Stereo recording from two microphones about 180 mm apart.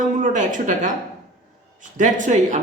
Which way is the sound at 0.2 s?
45° right (ahead or behind).